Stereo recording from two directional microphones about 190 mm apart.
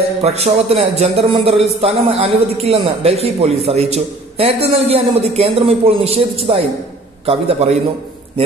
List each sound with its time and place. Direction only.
0.2 s speech: 35° right (ahead or behind)